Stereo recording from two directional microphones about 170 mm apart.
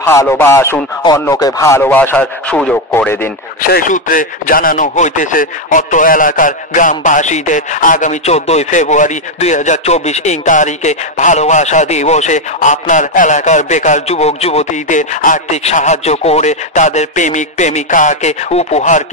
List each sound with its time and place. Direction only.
0.2 s speech: 15° left (ahead or behind)
3.7 s chopping: 50° left (ahead or behind)